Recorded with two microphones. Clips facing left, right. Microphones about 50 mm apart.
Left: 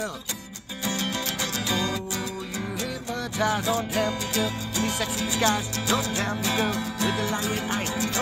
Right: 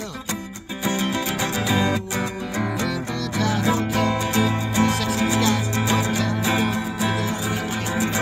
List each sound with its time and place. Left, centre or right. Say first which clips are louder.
0.8 s music: right 5 dB; centre
3.3 s music: right 1 dB; centre
3.6 s music: right 4 dB; right